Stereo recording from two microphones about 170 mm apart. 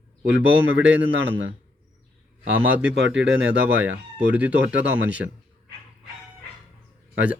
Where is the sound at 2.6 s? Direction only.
10° right (ahead or behind).